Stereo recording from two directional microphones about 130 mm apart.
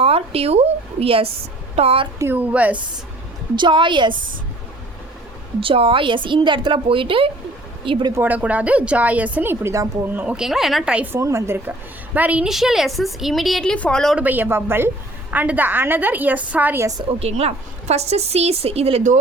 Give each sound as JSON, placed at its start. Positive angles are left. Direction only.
{"t": 0.0, "sound": "a woman's voice", "side_deg": -50}
{"t": 2.1, "sound": "speech", "side_deg": -15}
{"t": 3.5, "sound": "a woman's voice", "side_deg": -35}
{"t": 4.1, "sound": "a woman's voice", "side_deg": -90}
{"t": 5.5, "sound": "a woman's voice", "side_deg": -45}
{"t": 8.1, "sound": "speech", "side_deg": -15}
{"t": 10.1, "sound": "a woman's voice", "side_deg": -10}
{"t": 14.2, "sound": "speech", "side_deg": -15}
{"t": 17.2, "sound": "speech", "side_deg": -55}